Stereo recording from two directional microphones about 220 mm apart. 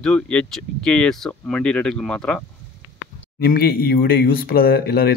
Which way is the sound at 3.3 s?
45° left (ahead or behind).